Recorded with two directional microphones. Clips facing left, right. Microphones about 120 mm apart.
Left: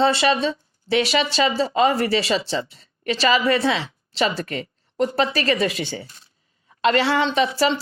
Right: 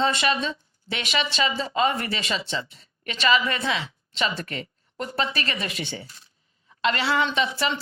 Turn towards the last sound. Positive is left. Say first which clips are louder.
# left 4 dB
turn(degrees=35)  # may be behind; listen again after turning